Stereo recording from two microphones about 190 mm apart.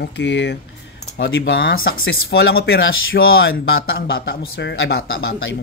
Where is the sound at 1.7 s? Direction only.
50° left (ahead or behind).